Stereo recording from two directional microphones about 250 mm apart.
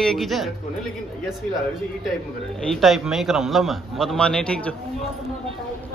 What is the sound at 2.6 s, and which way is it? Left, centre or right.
A man's voice, centre.